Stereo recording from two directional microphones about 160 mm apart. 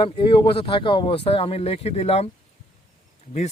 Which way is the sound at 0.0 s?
35° left (ahead or behind).